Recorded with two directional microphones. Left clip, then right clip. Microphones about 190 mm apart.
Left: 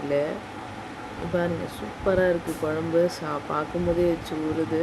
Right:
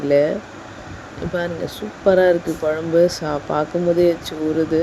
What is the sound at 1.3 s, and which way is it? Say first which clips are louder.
Speech: right 3 dB; 25° right (ahead or behind).